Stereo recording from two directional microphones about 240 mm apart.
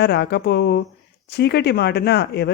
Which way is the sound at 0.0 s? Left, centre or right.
Left.